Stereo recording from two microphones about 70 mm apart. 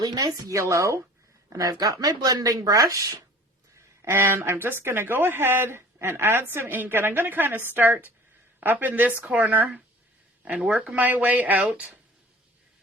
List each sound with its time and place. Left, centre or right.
0.0 s a woman's voice: right
1.5 s speech: right
3.8 s speech: right; by 11.9 s centre